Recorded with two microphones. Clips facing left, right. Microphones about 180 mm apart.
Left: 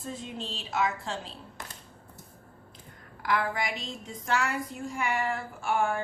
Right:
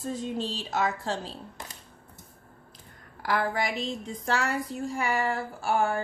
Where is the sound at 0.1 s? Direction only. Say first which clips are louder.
Right 6 dB; 40° right (ahead or behind).